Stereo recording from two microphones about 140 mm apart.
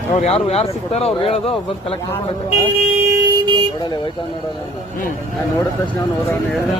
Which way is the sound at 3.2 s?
30° right (ahead or behind).